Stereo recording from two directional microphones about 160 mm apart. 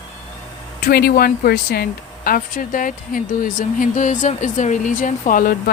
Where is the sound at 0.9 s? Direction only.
70° left (ahead or behind).